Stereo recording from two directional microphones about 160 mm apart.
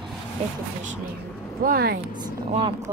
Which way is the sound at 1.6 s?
70° right (ahead or behind).